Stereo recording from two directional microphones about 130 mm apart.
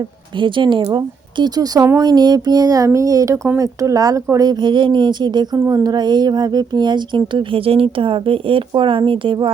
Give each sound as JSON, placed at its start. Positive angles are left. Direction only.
{"t": 0.3, "sound": "a woman's voice", "side_deg": -40}